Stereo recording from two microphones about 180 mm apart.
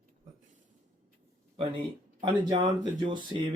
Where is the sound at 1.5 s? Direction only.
30° right (ahead or behind).